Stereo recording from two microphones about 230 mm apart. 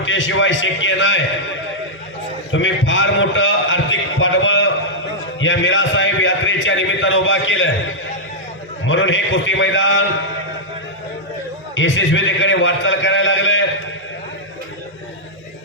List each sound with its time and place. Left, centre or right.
0.0 s a man's voice: left
2.5 s a sound: left
8.9 s a man's voice: left
11.7 s a man's voice: left